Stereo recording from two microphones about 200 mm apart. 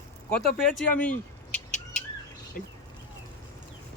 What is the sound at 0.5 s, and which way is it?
Speech, 5° left (ahead or behind).